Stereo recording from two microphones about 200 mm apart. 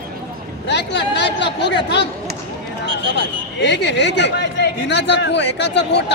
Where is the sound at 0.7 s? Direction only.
60° left (ahead or behind).